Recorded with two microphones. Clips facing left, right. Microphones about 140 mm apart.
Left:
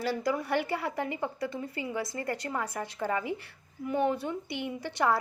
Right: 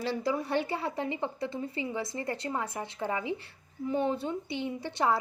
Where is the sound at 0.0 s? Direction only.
25° right (ahead or behind).